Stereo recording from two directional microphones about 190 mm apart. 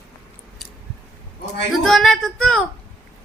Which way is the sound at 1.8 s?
Centre (ahead or behind).